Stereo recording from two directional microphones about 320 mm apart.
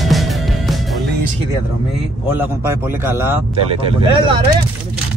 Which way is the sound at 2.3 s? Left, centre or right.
Centre.